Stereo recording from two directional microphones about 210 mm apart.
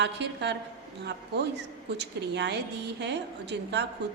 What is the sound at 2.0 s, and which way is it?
A woman's voice, 55° right (ahead or behind).